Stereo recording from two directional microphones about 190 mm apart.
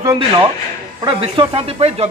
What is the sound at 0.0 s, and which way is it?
A man's voice, 20° right (ahead or behind).